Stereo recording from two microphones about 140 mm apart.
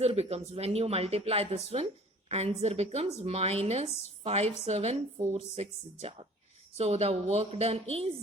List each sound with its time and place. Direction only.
0.0 s speech: 50° right (ahead or behind)